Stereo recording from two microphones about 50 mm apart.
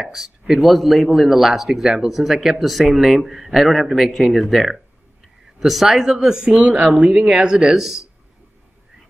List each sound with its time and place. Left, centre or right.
0.0 s a man's voice: centre
6.1 s speech: centre